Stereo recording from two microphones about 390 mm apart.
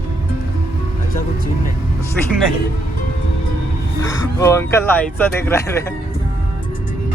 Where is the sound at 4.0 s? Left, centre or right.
Centre.